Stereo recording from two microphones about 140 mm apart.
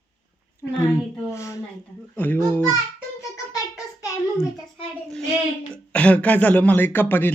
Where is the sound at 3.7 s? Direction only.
25° left (ahead or behind).